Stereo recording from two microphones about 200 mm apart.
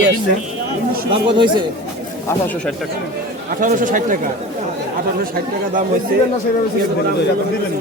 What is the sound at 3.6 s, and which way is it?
Speech, 40° right (ahead or behind).